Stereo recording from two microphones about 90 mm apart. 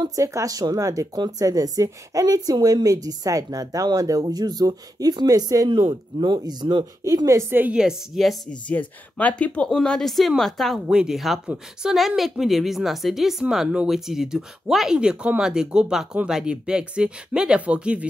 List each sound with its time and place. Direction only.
0.0 s a woman's voice: 40° right (ahead or behind)
6.1 s a woman's voice: 55° right (ahead or behind)
7.2 s speech: 35° right (ahead or behind)
7.5 s speech: 20° right (ahead or behind)
7.8 s speech: centre (ahead or behind)
8.5 s speech: 15° left (ahead or behind); by 18.0 s 15° right (ahead or behind)